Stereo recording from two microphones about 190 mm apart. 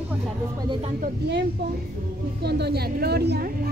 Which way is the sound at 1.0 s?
60° right (ahead or behind).